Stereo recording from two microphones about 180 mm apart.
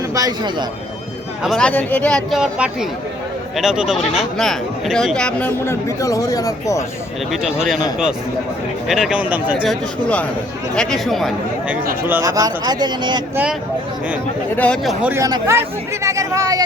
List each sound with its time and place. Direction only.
0.1 s a man's voice: 20° right (ahead or behind)
1.4 s speech: centre (ahead or behind); by 6.8 s 20° left (ahead or behind)
7.3 s speech: centre (ahead or behind)
9.6 s speech: 5° left (ahead or behind)
12.0 s a man's voice: 15° right (ahead or behind)
13.3 s speech: 5° right (ahead or behind)
14.5 s speech: 5° left (ahead or behind)
15.0 s speech: 15° right (ahead or behind)